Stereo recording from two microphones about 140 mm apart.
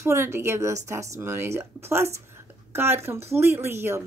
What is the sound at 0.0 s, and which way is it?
Speech, 20° right (ahead or behind).